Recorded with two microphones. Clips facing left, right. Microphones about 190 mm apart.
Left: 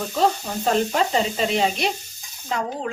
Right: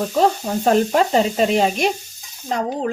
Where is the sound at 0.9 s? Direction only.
50° right (ahead or behind).